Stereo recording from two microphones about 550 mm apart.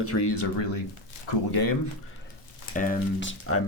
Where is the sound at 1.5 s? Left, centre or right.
Left.